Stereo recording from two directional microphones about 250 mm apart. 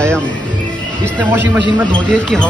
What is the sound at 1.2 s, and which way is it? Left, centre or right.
Speech, centre.